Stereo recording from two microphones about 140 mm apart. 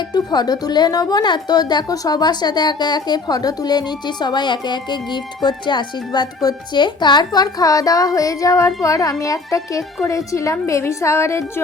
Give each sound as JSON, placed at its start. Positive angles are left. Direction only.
{"t": 0.1, "sound": "speech", "side_deg": 30}